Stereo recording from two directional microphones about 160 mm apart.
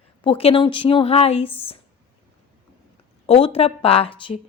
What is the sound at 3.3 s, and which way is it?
Speech, 35° left (ahead or behind).